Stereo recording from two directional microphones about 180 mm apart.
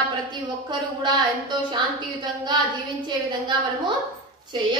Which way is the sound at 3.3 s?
25° right (ahead or behind).